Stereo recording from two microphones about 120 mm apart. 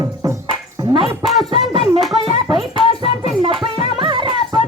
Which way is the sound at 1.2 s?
Centre (ahead or behind).